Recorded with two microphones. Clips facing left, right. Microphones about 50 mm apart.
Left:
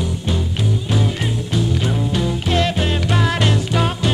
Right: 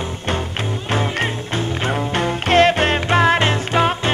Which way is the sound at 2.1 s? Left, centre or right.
Right.